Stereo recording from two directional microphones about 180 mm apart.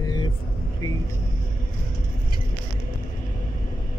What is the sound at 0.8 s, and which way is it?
Vehicle, 25° left (ahead or behind).